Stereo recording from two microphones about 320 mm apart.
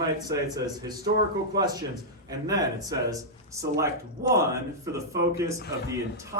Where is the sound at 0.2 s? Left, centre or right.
Centre.